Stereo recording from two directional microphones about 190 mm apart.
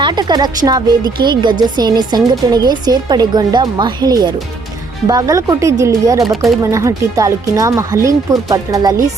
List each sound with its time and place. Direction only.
0.0 s a woman's voice: 20° right (ahead or behind)
6.2 s speech: centre (ahead or behind)
6.6 s speech: 15° right (ahead or behind)